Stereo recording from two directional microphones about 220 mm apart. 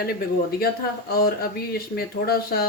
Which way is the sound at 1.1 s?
45° left (ahead or behind).